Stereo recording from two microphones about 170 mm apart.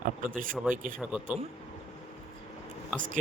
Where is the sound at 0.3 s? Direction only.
55° right (ahead or behind).